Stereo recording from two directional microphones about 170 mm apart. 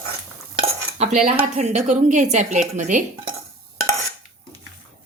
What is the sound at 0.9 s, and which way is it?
Stir, 40° right (ahead or behind).